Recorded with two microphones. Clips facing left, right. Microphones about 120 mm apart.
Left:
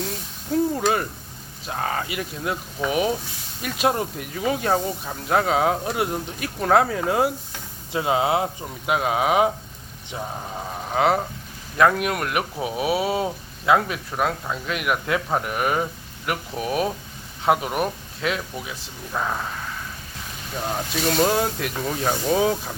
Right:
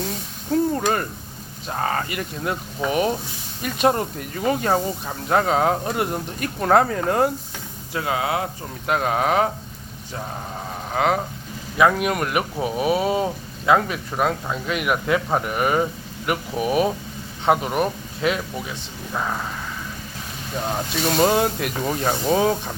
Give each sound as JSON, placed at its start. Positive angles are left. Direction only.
{"t": 0.7, "sound": "speech", "side_deg": 5}
{"t": 7.9, "sound": "speech", "side_deg": 20}
{"t": 8.9, "sound": "speech", "side_deg": 5}
{"t": 10.8, "sound": "speech", "side_deg": 0}
{"t": 20.7, "sound": "speech", "side_deg": -5}